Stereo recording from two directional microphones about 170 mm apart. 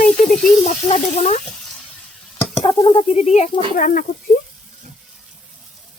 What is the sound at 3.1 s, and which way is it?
Speech, 40° left (ahead or behind).